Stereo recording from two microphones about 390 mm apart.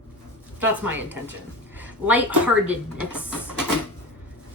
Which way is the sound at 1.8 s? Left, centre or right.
Centre.